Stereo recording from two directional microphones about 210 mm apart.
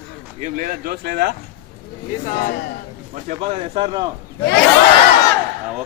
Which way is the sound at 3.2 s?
25° right (ahead or behind).